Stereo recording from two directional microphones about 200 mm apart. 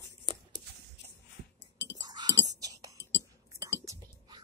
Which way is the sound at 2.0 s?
20° right (ahead or behind).